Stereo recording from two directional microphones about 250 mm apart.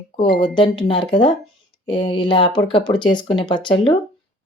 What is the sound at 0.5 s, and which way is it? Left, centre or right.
Speech, centre.